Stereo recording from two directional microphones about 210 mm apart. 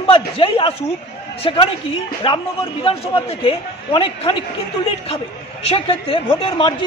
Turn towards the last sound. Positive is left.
turn(degrees=25)  # may be behind; listen again after turning